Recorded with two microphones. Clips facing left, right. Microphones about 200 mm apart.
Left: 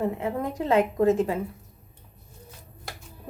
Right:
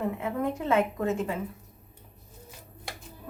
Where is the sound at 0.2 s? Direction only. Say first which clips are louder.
Left 1 dB; 35° left (ahead or behind).